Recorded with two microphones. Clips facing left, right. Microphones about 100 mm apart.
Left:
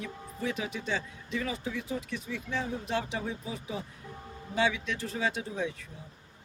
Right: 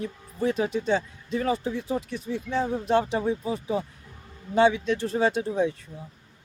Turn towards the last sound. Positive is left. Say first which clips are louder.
# right 8 dB
turn(degrees=-40)  # may be behind; listen again after turning